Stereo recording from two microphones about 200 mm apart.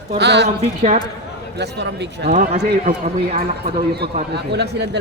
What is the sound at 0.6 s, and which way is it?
Speech, 35° right (ahead or behind).